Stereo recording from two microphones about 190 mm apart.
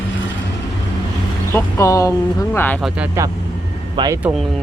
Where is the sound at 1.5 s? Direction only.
15° left (ahead or behind).